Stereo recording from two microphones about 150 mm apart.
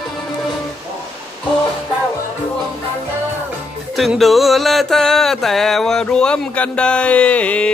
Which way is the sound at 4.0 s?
Centre (ahead or behind).